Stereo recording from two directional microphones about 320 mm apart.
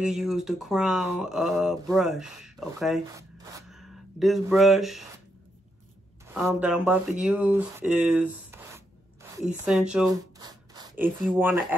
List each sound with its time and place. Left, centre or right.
0.0 s speech: centre
6.3 s speech: centre